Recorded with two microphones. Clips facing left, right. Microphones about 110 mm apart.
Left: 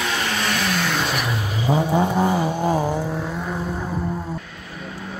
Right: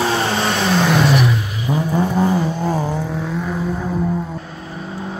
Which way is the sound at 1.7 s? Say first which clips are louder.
Even; 20° left (ahead or behind).